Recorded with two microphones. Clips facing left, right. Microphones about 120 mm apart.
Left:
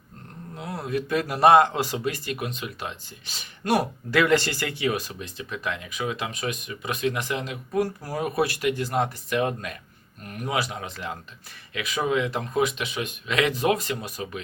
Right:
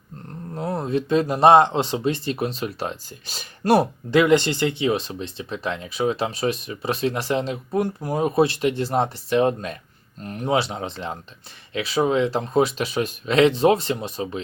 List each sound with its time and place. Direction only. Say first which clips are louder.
0.7 s speech: right 5 dB; 25° right (ahead or behind)